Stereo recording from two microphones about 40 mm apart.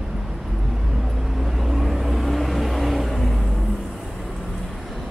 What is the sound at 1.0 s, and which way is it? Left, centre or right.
Vehicle, centre.